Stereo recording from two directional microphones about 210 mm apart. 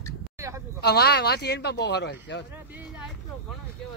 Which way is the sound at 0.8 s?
50° left (ahead or behind).